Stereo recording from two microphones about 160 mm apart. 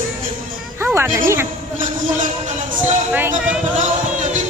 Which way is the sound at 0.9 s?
15° right (ahead or behind).